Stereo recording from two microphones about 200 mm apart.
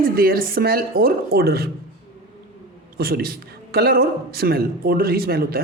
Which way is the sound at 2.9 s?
50° right (ahead or behind).